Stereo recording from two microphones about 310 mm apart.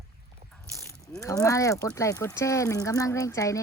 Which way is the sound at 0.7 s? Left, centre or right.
Centre.